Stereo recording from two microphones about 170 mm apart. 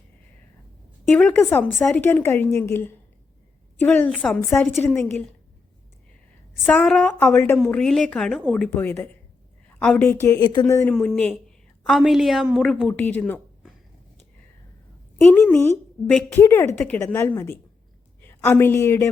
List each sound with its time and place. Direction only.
1.1 s a woman's voice: 10° left (ahead or behind)
6.7 s a woman's voice: 5° left (ahead or behind)
7.6 s a woman's voice: 5° left (ahead or behind)
10.9 s a woman's voice: 5° left (ahead or behind)
15.3 s a woman's voice: 10° left (ahead or behind)